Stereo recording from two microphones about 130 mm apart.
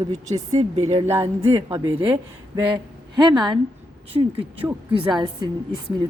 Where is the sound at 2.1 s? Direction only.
30° right (ahead or behind).